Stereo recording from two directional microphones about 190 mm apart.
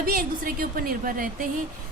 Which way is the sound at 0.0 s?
50° right (ahead or behind).